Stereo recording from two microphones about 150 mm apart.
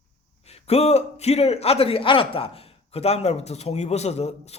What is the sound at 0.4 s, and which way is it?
A man's voice, 45° left (ahead or behind).